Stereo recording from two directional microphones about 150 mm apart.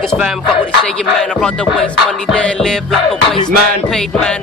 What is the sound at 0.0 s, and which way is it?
Music, centre (ahead or behind).